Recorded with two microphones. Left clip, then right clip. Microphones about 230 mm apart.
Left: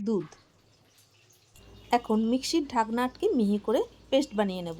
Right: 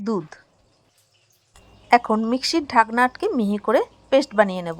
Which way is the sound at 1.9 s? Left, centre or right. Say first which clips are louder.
Right 9 dB; centre.